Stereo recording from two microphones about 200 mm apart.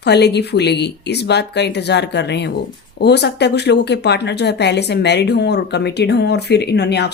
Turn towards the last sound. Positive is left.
turn(degrees=55)  # may be behind; listen again after turning